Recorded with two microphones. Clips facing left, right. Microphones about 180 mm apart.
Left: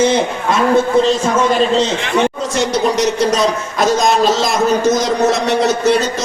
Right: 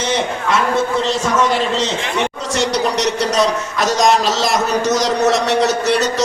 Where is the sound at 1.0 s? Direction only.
75° right (ahead or behind).